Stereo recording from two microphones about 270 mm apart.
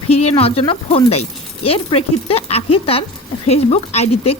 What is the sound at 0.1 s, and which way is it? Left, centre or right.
A woman's voice, left.